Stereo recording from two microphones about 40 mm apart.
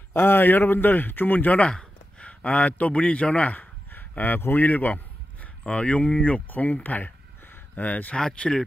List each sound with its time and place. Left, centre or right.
0.1 s a man's voice: left
1.7 s a man's voice: left
4.2 s a man's voice: left
4.6 s a sound: left
5.7 s speech: left
8.2 s speech: left